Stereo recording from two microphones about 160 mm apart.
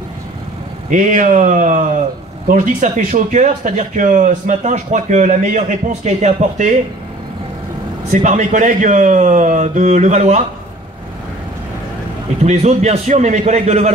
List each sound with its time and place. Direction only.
0.8 s speech: 50° right (ahead or behind)
8.1 s speech: 50° right (ahead or behind)
12.4 s speech: 40° right (ahead or behind)